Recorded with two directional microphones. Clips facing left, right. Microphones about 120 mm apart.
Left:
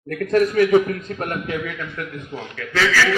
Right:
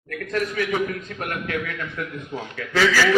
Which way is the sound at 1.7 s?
Centre (ahead or behind).